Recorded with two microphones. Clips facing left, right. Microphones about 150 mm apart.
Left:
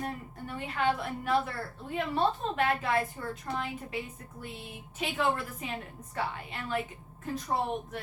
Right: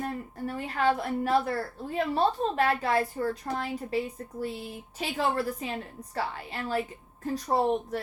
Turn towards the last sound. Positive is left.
turn(degrees=-35)  # may be behind; listen again after turning